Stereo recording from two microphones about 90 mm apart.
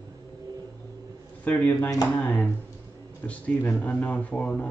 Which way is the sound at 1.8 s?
40° left (ahead or behind).